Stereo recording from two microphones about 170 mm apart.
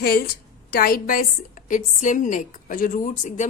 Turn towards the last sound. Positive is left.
turn(degrees=50)  # may be behind; listen again after turning